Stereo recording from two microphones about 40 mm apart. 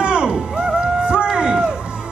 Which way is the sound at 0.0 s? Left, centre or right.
Right.